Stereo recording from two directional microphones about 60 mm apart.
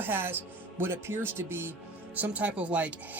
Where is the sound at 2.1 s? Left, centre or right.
Right.